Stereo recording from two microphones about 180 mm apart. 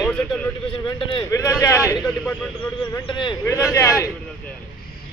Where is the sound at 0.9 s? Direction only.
30° left (ahead or behind).